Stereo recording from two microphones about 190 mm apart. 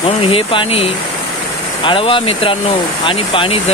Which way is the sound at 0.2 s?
30° left (ahead or behind).